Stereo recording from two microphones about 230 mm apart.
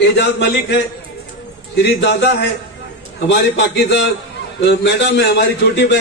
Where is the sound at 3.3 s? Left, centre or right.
Left.